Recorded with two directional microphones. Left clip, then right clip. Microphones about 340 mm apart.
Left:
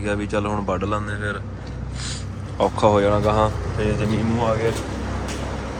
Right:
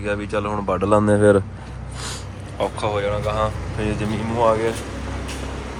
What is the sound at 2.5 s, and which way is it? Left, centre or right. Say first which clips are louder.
A man's voice: left 5 dB; centre.